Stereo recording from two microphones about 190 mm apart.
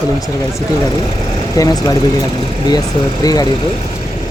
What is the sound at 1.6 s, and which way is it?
Speech, 20° left (ahead or behind).